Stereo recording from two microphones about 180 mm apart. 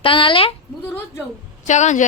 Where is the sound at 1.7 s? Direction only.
40° left (ahead or behind).